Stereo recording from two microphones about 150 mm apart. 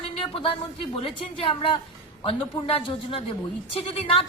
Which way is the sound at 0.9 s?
35° left (ahead or behind).